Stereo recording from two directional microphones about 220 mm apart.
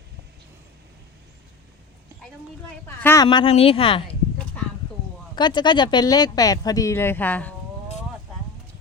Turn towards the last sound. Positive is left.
turn(degrees=5)  # may be behind; listen again after turning